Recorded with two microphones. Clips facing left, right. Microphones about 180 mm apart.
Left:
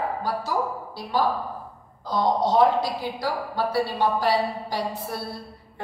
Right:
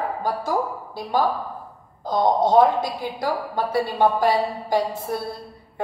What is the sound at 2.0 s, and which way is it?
A woman's voice, 50° right (ahead or behind).